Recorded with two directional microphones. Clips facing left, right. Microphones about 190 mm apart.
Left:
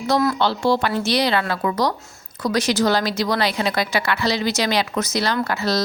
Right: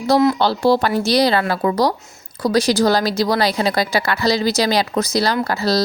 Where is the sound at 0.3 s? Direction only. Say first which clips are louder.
Right 3 dB; 35° right (ahead or behind).